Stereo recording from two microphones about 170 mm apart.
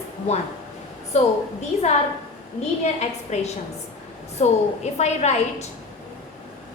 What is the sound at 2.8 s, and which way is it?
A woman's voice, 40° left (ahead or behind).